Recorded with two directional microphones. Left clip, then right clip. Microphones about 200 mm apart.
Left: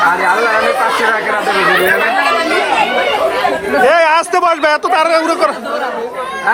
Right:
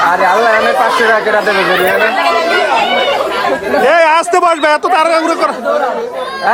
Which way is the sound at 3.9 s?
15° right (ahead or behind).